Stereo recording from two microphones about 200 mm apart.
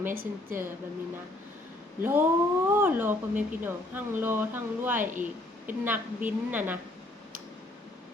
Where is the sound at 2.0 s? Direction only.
10° right (ahead or behind).